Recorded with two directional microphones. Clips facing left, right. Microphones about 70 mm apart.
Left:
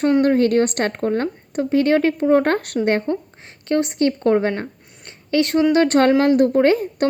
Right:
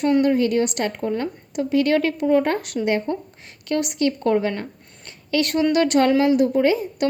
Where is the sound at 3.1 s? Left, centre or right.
Left.